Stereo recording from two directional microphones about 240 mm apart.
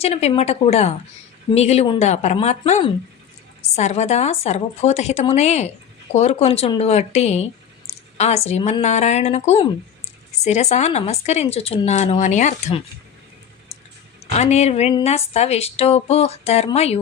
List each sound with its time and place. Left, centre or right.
0.0 s speech: left
8.4 s speech: left
14.3 s speech: left